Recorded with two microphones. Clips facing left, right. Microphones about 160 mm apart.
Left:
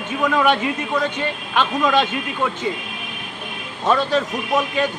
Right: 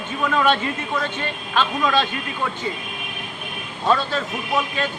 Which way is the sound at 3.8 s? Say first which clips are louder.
Left 3 dB; 15° left (ahead or behind).